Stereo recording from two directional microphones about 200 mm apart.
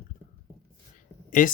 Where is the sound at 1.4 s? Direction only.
40° left (ahead or behind).